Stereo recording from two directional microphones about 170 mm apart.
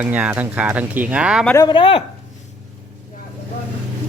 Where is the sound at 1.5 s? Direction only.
25° left (ahead or behind).